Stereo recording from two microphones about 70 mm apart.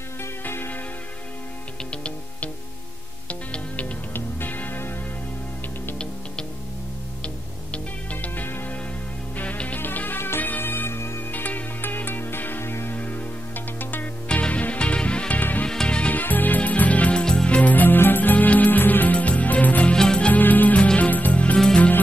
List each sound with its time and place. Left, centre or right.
0.2 s music: left
1.9 s music: centre
7.7 s music: left
11.3 s music: left
15.7 s music: centre
20.2 s music: left